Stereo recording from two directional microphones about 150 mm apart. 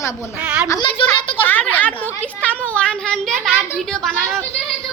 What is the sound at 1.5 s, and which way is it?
A woman's voice, 10° left (ahead or behind).